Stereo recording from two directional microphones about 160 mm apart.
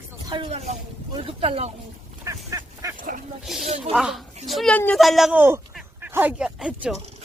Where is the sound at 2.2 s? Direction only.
20° right (ahead or behind).